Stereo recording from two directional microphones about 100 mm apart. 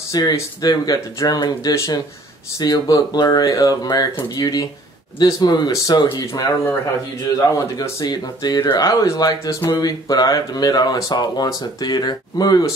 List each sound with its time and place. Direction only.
0.1 s speech: 40° left (ahead or behind)
7.3 s speech: 35° left (ahead or behind)